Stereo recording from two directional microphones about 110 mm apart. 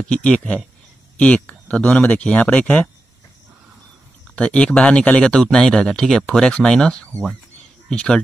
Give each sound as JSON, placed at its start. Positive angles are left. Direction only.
{"t": 0.1, "sound": "speech", "side_deg": 10}
{"t": 4.4, "sound": "speech", "side_deg": 10}